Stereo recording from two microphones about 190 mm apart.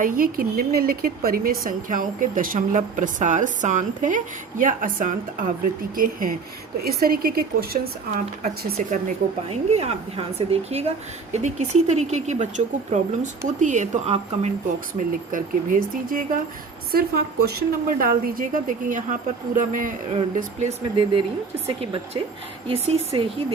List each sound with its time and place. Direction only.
0.0 s a woman's voice: 50° right (ahead or behind)
8.9 s a woman's voice: 35° right (ahead or behind)
14.9 s a woman's voice: 45° right (ahead or behind)
20.1 s a woman's voice: 35° right (ahead or behind)